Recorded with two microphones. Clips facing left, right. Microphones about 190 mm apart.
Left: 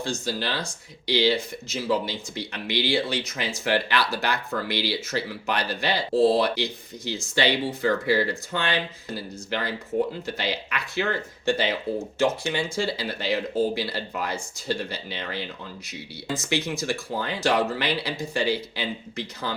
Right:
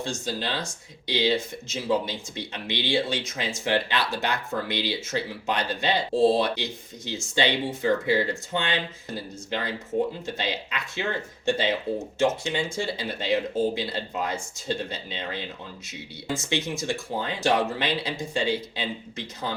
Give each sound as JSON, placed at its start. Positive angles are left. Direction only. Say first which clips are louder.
{"t": 0.0, "sound": "speech", "louder": "left 1 dB", "side_deg": -25}